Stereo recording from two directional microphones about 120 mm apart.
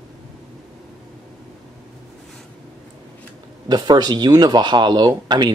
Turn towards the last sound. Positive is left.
turn(degrees=-40)  # may be behind; listen again after turning